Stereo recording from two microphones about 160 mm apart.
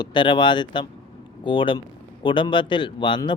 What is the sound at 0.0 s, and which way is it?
Speech, 30° left (ahead or behind).